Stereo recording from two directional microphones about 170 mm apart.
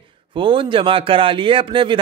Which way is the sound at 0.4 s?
30° right (ahead or behind).